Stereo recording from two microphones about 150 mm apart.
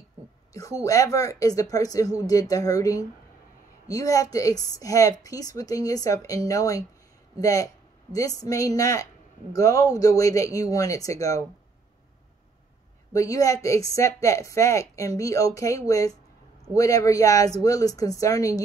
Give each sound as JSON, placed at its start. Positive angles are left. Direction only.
{"t": 0.5, "sound": "a woman's voice", "side_deg": 20}
{"t": 13.1, "sound": "a woman's voice", "side_deg": 20}